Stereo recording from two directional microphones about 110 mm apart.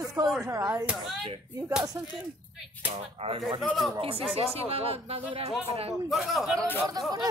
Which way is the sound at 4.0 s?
60° right (ahead or behind).